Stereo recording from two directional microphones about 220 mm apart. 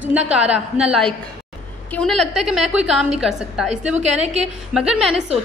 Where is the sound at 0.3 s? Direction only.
5° right (ahead or behind).